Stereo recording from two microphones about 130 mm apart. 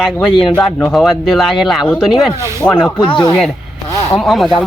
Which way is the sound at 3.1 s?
40° left (ahead or behind).